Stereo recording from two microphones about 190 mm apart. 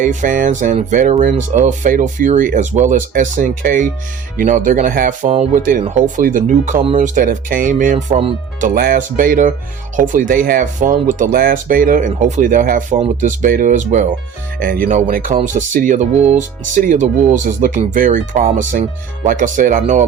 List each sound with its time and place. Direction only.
0.0 s speech: 40° right (ahead or behind)